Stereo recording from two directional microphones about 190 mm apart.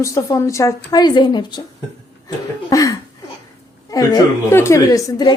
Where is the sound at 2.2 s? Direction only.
20° left (ahead or behind).